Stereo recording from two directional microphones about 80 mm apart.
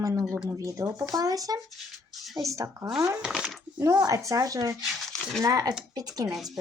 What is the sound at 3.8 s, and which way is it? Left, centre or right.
A child's voice, right.